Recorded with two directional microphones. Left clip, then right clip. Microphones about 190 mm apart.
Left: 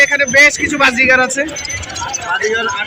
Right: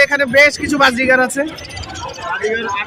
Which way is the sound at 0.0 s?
30° right (ahead or behind).